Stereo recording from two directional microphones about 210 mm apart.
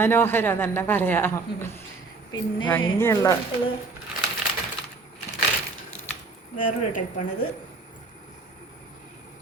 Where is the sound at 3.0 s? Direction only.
15° left (ahead or behind).